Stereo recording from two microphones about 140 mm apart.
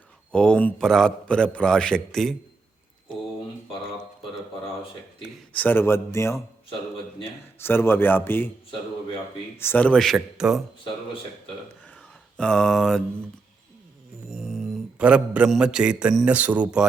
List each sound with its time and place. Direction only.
0.3 s a man's voice: 5° left (ahead or behind)
5.5 s a man's voice: 15° left (ahead or behind)
9.6 s a man's voice: 15° left (ahead or behind); by 10.6 s 5° right (ahead or behind)
11.9 s a sound: 5° left (ahead or behind)
14.3 s mantra: centre (ahead or behind)